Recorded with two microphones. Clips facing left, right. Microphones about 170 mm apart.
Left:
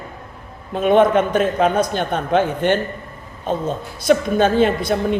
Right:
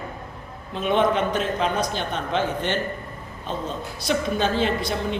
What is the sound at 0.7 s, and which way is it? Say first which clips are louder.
A woman's voice: left 7 dB; 50° left (ahead or behind).